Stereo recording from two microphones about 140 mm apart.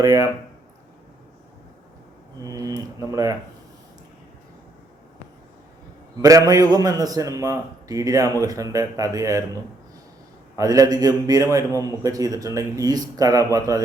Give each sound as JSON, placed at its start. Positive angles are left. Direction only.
{"t": 0.0, "sound": "a man's voice", "side_deg": -25}
{"t": 2.4, "sound": "a man's voice", "side_deg": -25}
{"t": 6.2, "sound": "a man's voice", "side_deg": -25}
{"t": 10.6, "sound": "a man's voice", "side_deg": -25}